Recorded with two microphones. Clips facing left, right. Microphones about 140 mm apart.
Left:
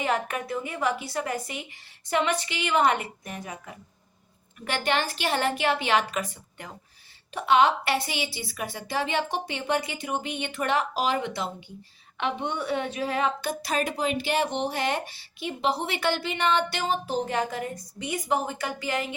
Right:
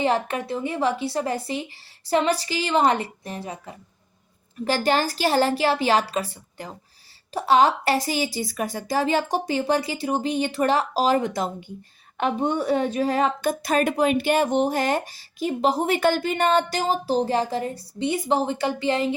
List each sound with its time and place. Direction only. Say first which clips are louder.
0.0 s a woman's voice: right 5 dB; 30° right (ahead or behind)